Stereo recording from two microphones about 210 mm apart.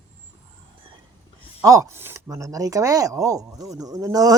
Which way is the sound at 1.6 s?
15° right (ahead or behind).